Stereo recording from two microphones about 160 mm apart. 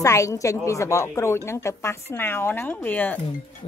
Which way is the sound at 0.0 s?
20° left (ahead or behind).